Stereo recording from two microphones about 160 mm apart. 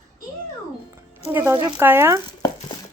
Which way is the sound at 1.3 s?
15° right (ahead or behind).